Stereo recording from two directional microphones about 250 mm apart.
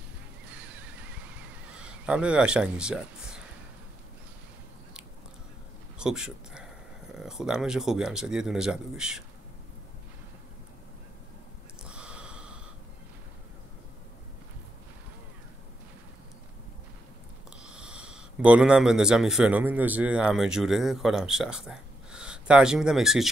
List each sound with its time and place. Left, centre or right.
0.5 s horse: centre
2.0 s speech: centre
5.9 s speech: centre
11.8 s snort: centre
17.6 s speech: centre